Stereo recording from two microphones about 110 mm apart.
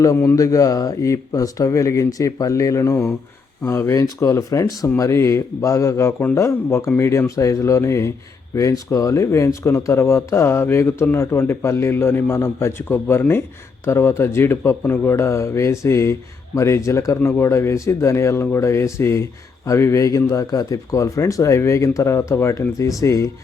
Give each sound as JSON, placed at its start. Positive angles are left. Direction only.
{"t": 0.3, "sound": "speech", "side_deg": 30}